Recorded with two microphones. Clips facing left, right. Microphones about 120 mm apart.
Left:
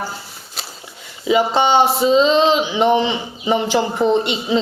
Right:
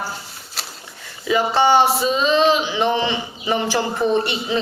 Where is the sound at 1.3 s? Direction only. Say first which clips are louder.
Left 1 dB; 20° left (ahead or behind).